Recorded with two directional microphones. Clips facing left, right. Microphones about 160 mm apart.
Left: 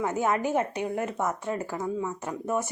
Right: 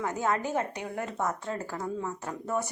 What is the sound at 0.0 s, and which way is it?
A woman's voice, 20° left (ahead or behind).